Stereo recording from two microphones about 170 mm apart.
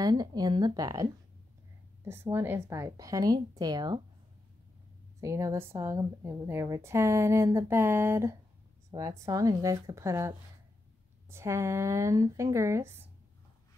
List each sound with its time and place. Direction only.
0.0 s a woman's voice: 25° right (ahead or behind)
2.3 s a woman's voice: 15° right (ahead or behind)
5.2 s a woman's voice: 20° right (ahead or behind)